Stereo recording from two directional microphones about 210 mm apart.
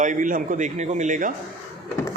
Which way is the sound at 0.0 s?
40° right (ahead or behind).